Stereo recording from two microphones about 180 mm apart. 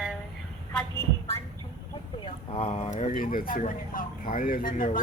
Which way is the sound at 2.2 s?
30° left (ahead or behind).